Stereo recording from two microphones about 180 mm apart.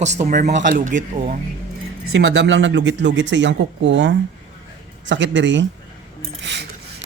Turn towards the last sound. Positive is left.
turn(degrees=-75)  # may be behind; listen again after turning